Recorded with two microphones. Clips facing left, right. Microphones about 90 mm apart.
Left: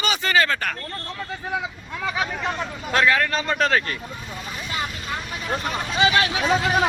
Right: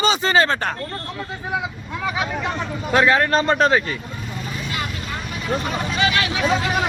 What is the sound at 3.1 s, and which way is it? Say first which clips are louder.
Speech: right 4 dB; 25° right (ahead or behind).